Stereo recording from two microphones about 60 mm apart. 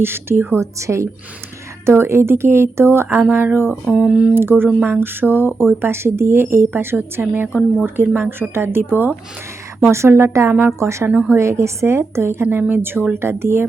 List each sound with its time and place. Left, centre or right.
0.0 s a woman's voice: right
1.8 s a woman's voice: right
4.0 s speech: centre
4.4 s speech: right
9.8 s a woman's voice: right
11.1 s a woman's voice: right
11.3 s a woman's voice: right